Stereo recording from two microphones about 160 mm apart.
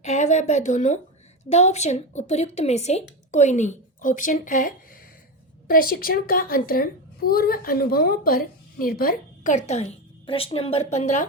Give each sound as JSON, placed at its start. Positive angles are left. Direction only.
{"t": 0.0, "sound": "a woman's voice", "side_deg": 45}